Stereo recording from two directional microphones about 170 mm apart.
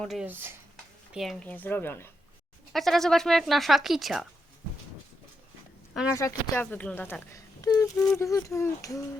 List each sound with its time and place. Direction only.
0.0 s speech: centre (ahead or behind)
1.5 s speech: 10° left (ahead or behind)
2.7 s speech: centre (ahead or behind)
6.1 s speech: 15° left (ahead or behind)